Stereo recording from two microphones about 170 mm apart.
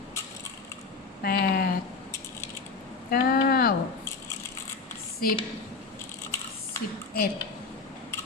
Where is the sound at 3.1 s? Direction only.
65° left (ahead or behind).